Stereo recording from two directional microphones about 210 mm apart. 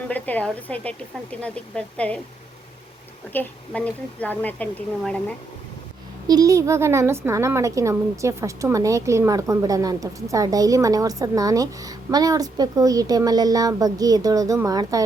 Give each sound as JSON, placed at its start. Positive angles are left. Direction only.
{"t": 0.1, "sound": "a woman's voice", "side_deg": 5}
{"t": 3.3, "sound": "a woman's voice", "side_deg": 5}
{"t": 6.2, "sound": "a woman's voice", "side_deg": -15}